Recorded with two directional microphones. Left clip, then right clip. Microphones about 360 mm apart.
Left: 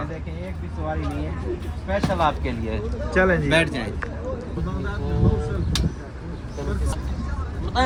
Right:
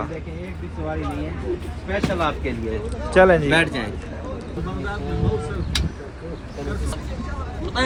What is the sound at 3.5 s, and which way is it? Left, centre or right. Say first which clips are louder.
Speech: right 1 dB; centre.